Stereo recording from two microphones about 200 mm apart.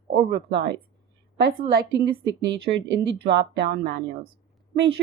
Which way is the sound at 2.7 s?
60° right (ahead or behind).